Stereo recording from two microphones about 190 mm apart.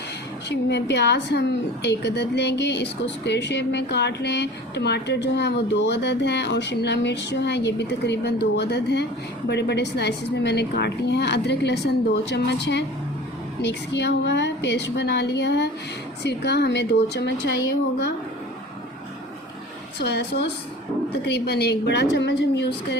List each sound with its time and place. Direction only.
0.4 s a woman's voice: 60° left (ahead or behind)
20.0 s a woman's voice: 60° left (ahead or behind)